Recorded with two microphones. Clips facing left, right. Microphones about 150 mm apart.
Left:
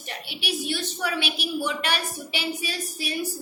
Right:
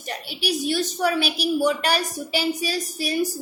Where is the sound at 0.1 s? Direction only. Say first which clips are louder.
Right 5 dB; 40° right (ahead or behind).